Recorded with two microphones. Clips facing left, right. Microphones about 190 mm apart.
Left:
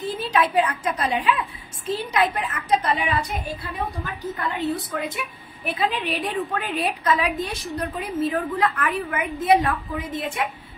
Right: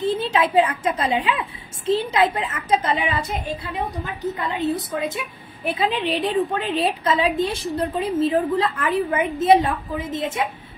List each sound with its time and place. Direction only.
0.0 s a woman's voice: 25° right (ahead or behind)